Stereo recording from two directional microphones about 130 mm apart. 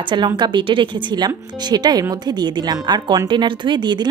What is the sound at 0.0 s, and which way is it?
Speech, 35° right (ahead or behind).